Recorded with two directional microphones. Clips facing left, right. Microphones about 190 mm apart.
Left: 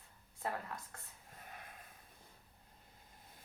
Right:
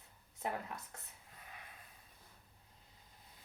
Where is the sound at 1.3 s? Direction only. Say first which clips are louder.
Left 3 dB; 45° left (ahead or behind).